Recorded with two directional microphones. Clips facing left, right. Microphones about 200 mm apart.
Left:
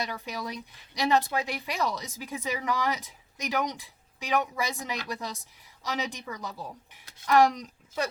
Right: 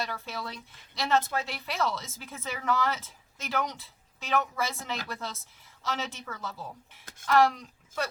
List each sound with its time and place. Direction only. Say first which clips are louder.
0.0 s speech: left 2 dB; 15° left (ahead or behind)